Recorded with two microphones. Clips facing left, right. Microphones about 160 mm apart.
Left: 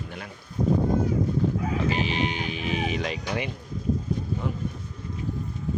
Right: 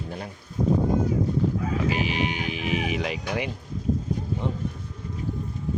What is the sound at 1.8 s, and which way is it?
Speech, 10° right (ahead or behind).